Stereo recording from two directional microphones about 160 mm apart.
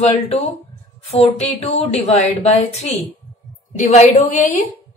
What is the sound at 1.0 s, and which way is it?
A woman's voice, 45° left (ahead or behind).